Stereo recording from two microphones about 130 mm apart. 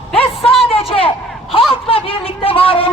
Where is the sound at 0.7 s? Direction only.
45° left (ahead or behind).